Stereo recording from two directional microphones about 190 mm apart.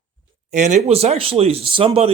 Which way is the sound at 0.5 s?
40° right (ahead or behind).